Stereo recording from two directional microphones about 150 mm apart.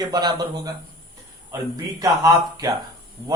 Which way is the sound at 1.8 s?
25° right (ahead or behind).